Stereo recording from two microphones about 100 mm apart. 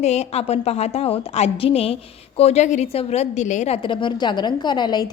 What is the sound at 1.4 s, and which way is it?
Speech, 80° left.